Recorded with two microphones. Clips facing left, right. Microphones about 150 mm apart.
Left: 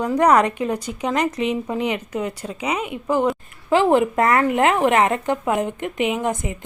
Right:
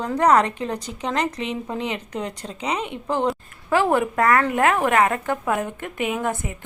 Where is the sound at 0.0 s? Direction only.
15° left (ahead or behind).